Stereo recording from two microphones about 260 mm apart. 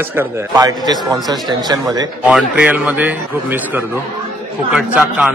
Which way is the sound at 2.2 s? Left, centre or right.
Centre.